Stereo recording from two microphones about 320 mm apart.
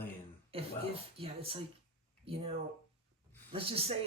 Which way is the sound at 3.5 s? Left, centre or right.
Centre.